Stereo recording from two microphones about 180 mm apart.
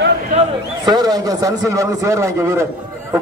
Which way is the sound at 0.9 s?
20° right (ahead or behind).